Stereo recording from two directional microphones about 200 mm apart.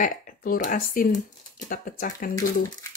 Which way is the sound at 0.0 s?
45° left (ahead or behind).